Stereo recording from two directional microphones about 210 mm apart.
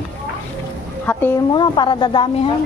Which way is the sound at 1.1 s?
10° left (ahead or behind).